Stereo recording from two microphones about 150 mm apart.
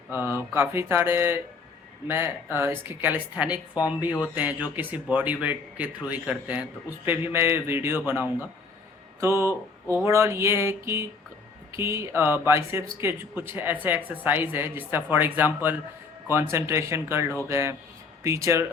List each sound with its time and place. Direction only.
0.5 s speech: 15° right (ahead or behind)
11.8 s speech: 15° right (ahead or behind)